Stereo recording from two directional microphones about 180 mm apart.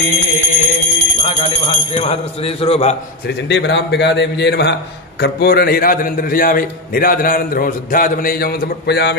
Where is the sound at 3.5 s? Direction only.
80° left.